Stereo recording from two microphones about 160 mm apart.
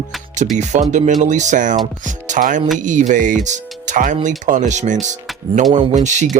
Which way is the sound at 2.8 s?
50° right (ahead or behind).